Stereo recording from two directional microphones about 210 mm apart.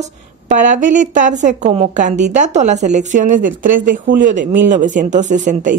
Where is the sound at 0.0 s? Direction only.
35° right (ahead or behind).